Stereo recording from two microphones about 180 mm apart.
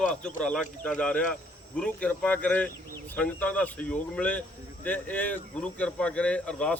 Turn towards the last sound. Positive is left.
turn(degrees=5)  # may be behind; listen again after turning